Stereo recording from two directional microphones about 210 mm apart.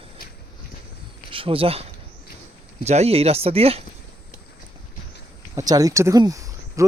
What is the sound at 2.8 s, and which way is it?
Speech, 30° right (ahead or behind).